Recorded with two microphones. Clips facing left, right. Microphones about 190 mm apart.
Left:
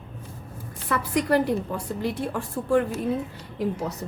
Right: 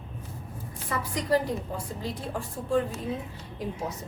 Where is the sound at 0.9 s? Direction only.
65° left (ahead or behind).